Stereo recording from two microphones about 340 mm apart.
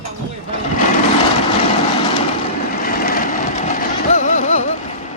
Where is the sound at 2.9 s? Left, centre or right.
Left.